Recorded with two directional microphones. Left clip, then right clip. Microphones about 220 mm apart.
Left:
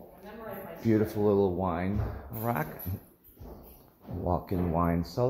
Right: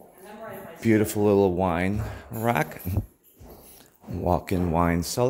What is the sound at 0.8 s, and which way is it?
Speech, 45° right (ahead or behind).